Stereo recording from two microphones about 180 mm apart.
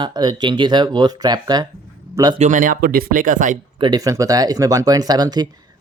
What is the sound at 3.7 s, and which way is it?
Speech, 25° right (ahead or behind).